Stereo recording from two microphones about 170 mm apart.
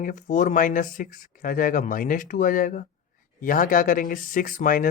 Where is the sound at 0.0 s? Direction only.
50° left (ahead or behind).